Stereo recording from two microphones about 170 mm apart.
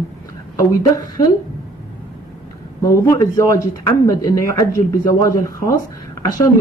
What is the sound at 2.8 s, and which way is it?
Speech, 20° left (ahead or behind).